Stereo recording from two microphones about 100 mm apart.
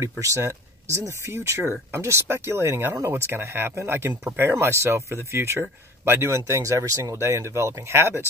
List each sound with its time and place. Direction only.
0.2 s speech: 30° right (ahead or behind)